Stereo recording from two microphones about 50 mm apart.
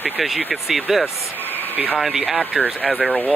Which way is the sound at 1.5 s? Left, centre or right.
Left.